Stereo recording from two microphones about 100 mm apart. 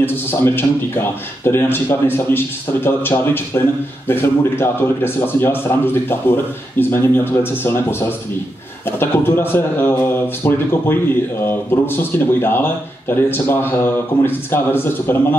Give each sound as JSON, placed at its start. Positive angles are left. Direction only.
{"t": 0.0, "sound": "a man's voice", "side_deg": 25}